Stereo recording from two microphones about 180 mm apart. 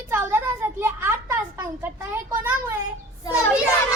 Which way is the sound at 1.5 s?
15° right (ahead or behind).